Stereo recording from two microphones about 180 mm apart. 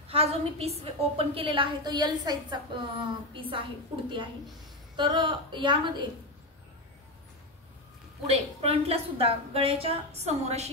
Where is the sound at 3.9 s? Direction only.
30° right (ahead or behind).